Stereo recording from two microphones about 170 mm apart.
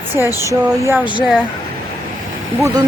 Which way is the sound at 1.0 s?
10° right (ahead or behind).